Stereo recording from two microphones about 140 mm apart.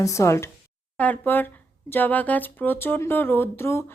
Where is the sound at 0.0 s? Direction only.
20° left (ahead or behind).